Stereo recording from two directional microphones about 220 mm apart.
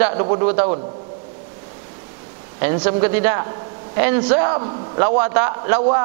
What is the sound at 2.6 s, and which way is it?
Speech, 15° right (ahead or behind).